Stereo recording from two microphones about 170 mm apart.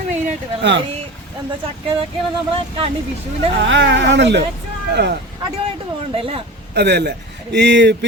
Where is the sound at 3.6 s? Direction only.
90° right.